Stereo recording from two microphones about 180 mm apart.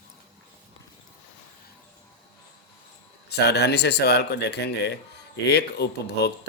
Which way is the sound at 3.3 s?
65° left (ahead or behind).